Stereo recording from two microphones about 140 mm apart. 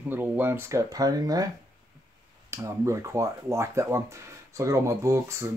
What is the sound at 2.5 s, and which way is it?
Speech, 20° right (ahead or behind).